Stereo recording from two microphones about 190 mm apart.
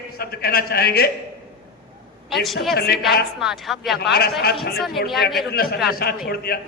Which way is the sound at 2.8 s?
55° left (ahead or behind).